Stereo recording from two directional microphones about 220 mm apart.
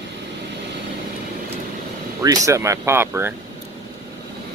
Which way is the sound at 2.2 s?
15° right (ahead or behind).